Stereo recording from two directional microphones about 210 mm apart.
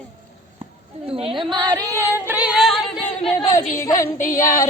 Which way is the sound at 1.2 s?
25° right (ahead or behind).